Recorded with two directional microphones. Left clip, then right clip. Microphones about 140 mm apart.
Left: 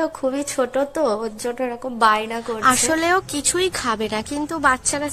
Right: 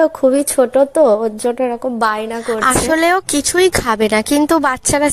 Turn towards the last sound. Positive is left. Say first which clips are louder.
# right 5 dB
turn(degrees=-70)  # may be behind; listen again after turning